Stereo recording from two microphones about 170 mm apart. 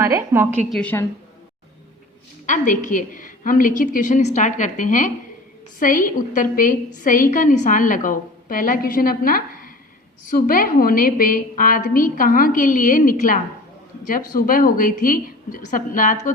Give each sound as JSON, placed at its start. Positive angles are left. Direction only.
{"t": 0.0, "sound": "a woman's voice", "side_deg": -15}
{"t": 0.7, "sound": "a woman's voice", "side_deg": 10}
{"t": 2.5, "sound": "a woman's voice", "side_deg": 50}